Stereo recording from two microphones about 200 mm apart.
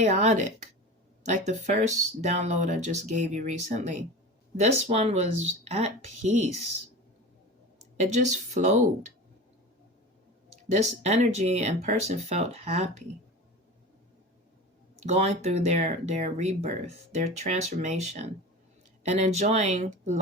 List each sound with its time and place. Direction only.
0.0 s speech: 35° right (ahead or behind)
7.9 s speech: 35° right (ahead or behind)
10.7 s speech: 35° right (ahead or behind)
15.0 s speech: 35° right (ahead or behind)